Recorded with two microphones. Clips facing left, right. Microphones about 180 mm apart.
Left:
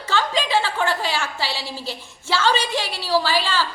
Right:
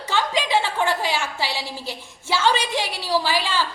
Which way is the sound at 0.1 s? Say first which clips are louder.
Even; 15° right (ahead or behind).